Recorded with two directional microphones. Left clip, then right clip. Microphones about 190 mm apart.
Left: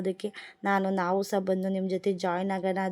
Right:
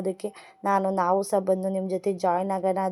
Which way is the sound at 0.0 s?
30° left (ahead or behind).